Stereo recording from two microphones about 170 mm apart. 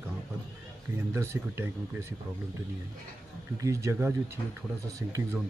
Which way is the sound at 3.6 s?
15° right (ahead or behind).